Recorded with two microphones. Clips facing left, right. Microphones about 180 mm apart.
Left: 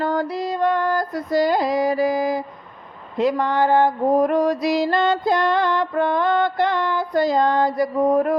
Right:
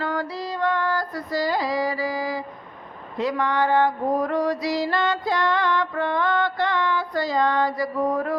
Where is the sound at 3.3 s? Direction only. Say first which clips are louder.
Left 1 dB; 45° left (ahead or behind).